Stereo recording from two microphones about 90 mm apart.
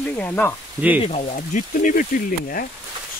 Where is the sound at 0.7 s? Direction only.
20° right (ahead or behind).